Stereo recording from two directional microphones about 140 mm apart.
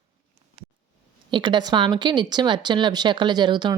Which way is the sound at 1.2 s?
35° right (ahead or behind).